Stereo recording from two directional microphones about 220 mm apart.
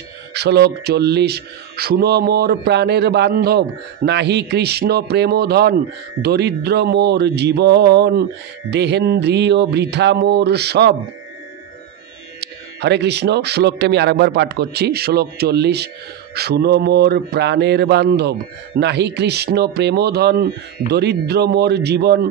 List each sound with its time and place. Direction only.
0.3 s speech: 50° right (ahead or behind)
12.4 s speech: 50° right (ahead or behind)